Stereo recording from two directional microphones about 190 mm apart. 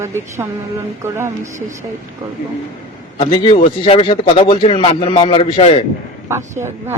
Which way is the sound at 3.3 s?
25° left (ahead or behind).